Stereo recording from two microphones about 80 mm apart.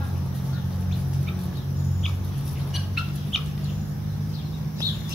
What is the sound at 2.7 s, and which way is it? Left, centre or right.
Bird, centre.